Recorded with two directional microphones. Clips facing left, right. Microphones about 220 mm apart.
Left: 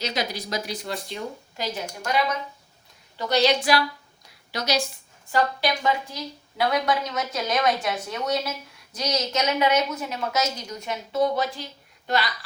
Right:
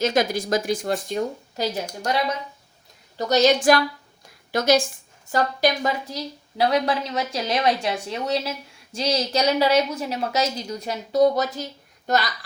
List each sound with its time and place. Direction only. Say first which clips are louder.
0.0 s a woman's voice: right 8 dB; 50° right (ahead or behind)
3.2 s a woman's voice: right 3 dB; 45° right (ahead or behind)